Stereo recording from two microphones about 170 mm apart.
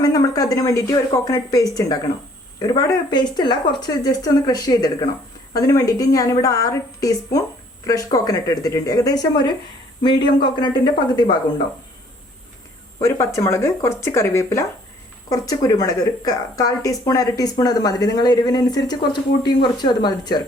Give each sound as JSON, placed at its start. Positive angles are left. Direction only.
{"t": 0.0, "sound": "a woman's voice", "side_deg": 20}
{"t": 13.0, "sound": "a woman's voice", "side_deg": 15}